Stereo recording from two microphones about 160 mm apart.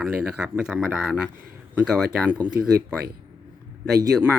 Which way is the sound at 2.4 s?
30° left (ahead or behind).